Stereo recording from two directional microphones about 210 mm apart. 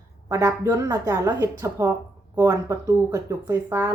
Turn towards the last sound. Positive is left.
turn(degrees=-10)  # may be behind; listen again after turning